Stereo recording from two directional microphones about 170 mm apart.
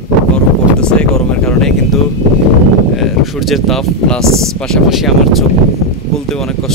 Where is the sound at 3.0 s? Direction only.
Centre (ahead or behind).